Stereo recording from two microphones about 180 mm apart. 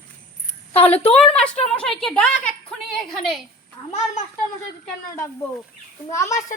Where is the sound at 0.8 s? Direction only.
10° left (ahead or behind).